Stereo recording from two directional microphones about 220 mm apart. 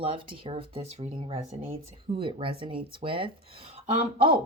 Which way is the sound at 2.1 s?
25° right (ahead or behind).